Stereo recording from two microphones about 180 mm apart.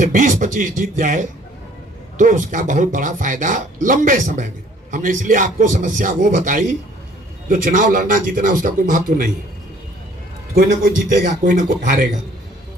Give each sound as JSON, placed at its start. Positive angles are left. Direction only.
{"t": 0.0, "sound": "speech", "side_deg": -45}
{"t": 11.1, "sound": "speech", "side_deg": -45}